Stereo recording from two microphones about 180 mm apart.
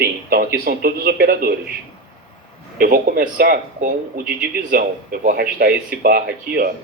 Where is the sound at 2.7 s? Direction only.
55° right (ahead or behind).